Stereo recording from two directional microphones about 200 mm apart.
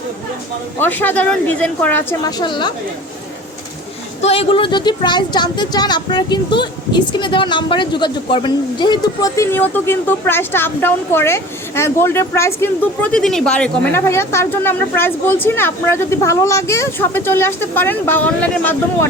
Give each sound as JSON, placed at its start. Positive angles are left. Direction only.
{"t": 0.8, "sound": "speech", "side_deg": 10}
{"t": 2.4, "sound": "a woman's voice", "side_deg": 20}
{"t": 4.2, "sound": "speech", "side_deg": 30}